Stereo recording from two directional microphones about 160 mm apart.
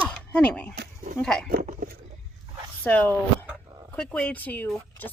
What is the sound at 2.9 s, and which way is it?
Speech, 10° left (ahead or behind).